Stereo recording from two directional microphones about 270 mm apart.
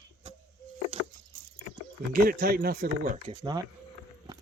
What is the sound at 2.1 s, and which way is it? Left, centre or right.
Speech, right.